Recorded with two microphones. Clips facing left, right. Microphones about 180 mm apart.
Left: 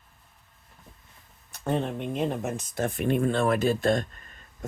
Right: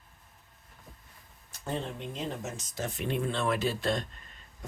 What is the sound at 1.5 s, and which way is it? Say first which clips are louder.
Speech: left 7 dB; 60° left (ahead or behind).